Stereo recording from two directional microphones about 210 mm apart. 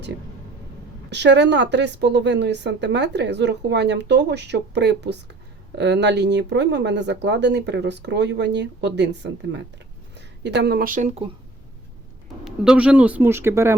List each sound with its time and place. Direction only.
1.1 s a woman's voice: 55° right (ahead or behind); by 11.3 s 30° right (ahead or behind)
12.5 s speech: 5° right (ahead or behind)